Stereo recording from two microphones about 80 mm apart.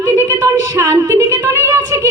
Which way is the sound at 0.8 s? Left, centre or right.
Right.